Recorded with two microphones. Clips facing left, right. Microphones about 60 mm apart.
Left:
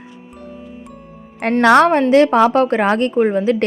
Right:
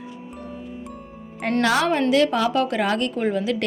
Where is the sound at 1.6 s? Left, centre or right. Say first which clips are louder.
Left 11 dB; left.